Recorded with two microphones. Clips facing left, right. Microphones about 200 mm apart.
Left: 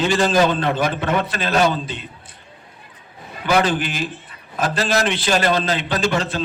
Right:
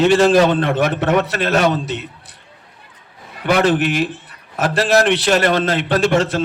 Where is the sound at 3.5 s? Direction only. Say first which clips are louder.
Right 1 dB; 65° right (ahead or behind).